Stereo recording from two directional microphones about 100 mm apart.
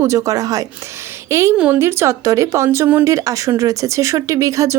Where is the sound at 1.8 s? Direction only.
30° right (ahead or behind).